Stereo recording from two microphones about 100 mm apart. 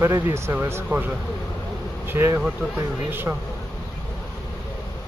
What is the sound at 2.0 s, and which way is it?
Speech, 25° right (ahead or behind).